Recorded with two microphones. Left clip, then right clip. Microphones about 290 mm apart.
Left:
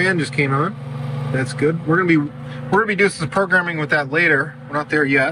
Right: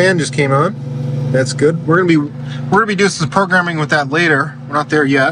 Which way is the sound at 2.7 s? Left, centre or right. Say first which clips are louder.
Right 3 dB; centre.